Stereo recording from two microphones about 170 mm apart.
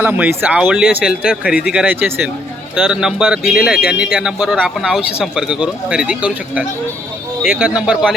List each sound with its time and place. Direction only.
0.0 s speech: 10° right (ahead or behind)